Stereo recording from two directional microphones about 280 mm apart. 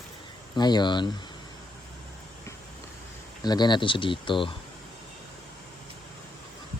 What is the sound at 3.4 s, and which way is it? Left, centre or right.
Speech, centre.